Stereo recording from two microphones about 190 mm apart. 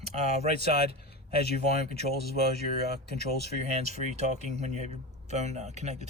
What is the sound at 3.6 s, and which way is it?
Speech, 35° right (ahead or behind).